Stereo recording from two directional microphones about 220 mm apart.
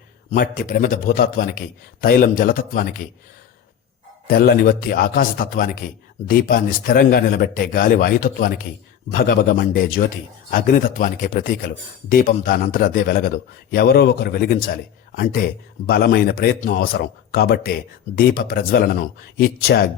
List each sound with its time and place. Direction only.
0.3 s speech: 40° left (ahead or behind)
4.3 s a man's voice: 40° left (ahead or behind)